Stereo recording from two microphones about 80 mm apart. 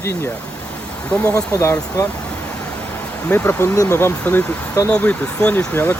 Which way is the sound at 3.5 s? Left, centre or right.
Left.